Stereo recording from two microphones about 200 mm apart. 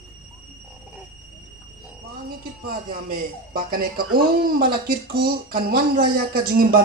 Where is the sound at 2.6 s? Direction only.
45° right (ahead or behind).